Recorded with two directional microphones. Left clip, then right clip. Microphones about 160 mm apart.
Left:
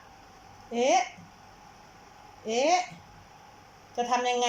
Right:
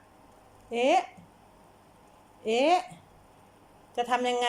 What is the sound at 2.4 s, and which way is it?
Speech, 10° right (ahead or behind).